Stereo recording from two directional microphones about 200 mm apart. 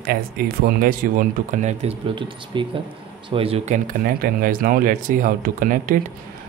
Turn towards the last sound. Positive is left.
turn(degrees=-40)  # may be behind; listen again after turning